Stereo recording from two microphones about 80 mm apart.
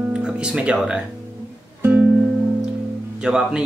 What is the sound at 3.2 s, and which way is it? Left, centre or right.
Music, centre.